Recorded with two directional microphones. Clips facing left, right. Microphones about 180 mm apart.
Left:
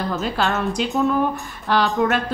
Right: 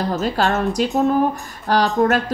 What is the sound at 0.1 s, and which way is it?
A woman's voice, 40° right (ahead or behind).